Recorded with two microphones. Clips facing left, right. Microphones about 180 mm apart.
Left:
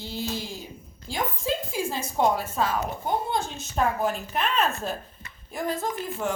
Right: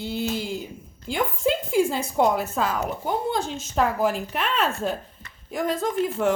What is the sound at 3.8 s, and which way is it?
A woman's voice, 90° right.